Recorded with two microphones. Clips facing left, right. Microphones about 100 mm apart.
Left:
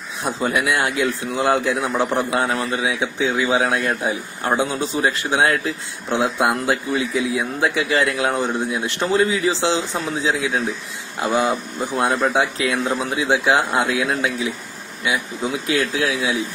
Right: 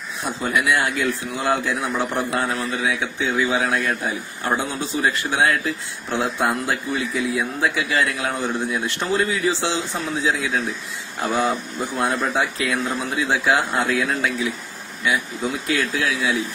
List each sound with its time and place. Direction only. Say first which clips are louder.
0.4 s a man's voice: even; 25° left (ahead or behind)
15.7 s a man's voice: left 3 dB; 30° left (ahead or behind)